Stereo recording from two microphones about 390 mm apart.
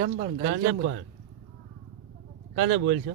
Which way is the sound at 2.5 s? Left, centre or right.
Right.